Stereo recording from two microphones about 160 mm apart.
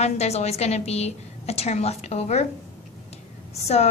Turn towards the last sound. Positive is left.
turn(degrees=40)  # may be behind; listen again after turning